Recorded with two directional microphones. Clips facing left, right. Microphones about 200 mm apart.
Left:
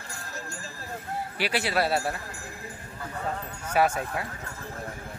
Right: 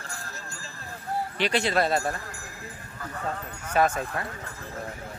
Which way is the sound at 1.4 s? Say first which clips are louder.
Right 2 dB; 5° left (ahead or behind).